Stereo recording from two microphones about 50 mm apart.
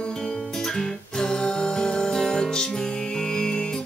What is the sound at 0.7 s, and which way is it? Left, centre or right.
Music, centre.